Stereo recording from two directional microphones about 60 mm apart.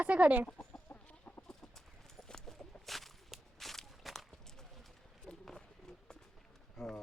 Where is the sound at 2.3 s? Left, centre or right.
Centre.